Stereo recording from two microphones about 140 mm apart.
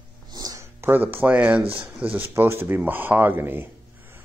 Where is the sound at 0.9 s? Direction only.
15° right (ahead or behind).